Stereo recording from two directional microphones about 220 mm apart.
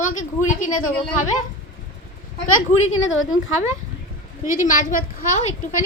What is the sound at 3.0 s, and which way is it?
Speech, 60° left (ahead or behind).